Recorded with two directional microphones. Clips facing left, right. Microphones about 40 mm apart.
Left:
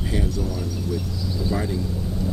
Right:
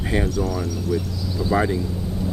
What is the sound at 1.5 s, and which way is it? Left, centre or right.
Speech, right.